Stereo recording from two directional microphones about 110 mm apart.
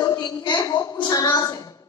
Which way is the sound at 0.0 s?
40° left (ahead or behind).